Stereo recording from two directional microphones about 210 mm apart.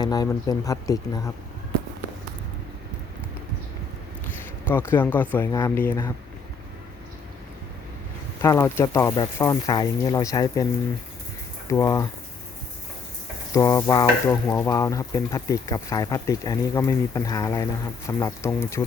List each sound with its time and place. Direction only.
0.0 s stir: 20° left (ahead or behind)
4.7 s stir: 10° left (ahead or behind)
8.4 s stir: 15° left (ahead or behind)
11.7 s stir: 15° left (ahead or behind)
13.5 s stir: 15° left (ahead or behind)